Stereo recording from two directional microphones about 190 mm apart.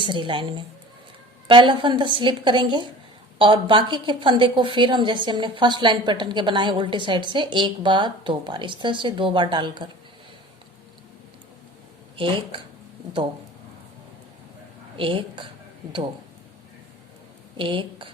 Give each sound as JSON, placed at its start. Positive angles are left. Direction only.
{"t": 0.0, "sound": "a woman's voice", "side_deg": -25}
{"t": 12.1, "sound": "speech", "side_deg": -25}
{"t": 14.9, "sound": "a woman's voice", "side_deg": -25}
{"t": 17.6, "sound": "a woman's voice", "side_deg": -25}